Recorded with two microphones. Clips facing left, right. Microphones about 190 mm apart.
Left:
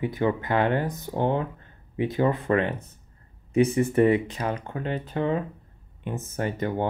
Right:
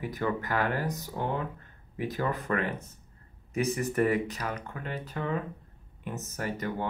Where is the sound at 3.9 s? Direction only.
25° left (ahead or behind).